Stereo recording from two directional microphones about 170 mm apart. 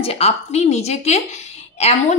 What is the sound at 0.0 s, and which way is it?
A woman's voice, 35° left (ahead or behind).